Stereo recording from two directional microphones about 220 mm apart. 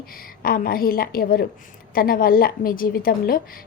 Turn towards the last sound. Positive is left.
turn(degrees=40)  # may be behind; listen again after turning